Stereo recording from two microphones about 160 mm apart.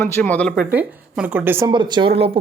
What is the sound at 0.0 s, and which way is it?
Speech, 10° left (ahead or behind).